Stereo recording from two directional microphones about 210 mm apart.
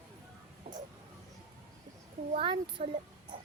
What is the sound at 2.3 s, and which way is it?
Speech, 25° right (ahead or behind).